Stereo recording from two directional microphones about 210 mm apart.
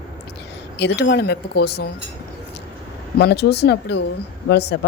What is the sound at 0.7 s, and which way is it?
Speech, 55° left (ahead or behind).